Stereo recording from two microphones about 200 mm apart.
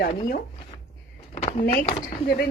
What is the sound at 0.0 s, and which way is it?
Speech, 50° left (ahead or behind).